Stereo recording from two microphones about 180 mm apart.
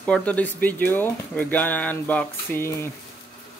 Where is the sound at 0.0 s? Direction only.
5° left (ahead or behind).